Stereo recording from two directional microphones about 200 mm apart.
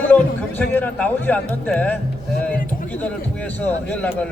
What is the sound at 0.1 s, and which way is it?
A man's voice, 10° left (ahead or behind).